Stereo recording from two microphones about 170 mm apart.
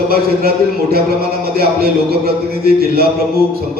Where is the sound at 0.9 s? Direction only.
65° right (ahead or behind).